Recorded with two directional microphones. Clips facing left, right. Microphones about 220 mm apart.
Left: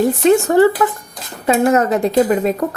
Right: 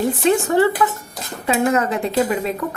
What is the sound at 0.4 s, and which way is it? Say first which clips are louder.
Speech: left 4 dB; 45° left (ahead or behind).